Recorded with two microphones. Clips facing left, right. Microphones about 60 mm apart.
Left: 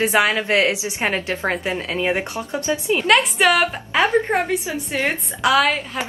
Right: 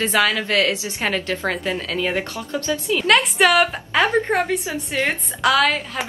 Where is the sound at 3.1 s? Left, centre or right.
Centre.